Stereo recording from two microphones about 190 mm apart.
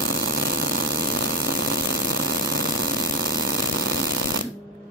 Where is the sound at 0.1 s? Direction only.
70° right (ahead or behind).